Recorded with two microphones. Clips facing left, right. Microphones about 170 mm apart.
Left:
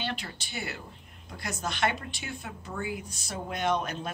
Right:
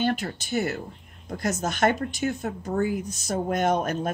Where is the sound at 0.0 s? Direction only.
45° right (ahead or behind).